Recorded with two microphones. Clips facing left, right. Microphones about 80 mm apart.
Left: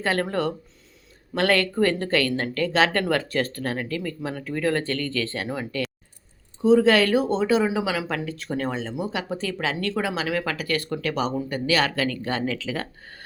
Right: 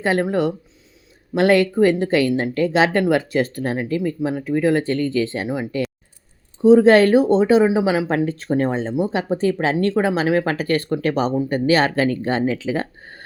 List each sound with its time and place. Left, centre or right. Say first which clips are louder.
0.0 s speech: right 5 dB; centre
6.6 s speech: right 6 dB; right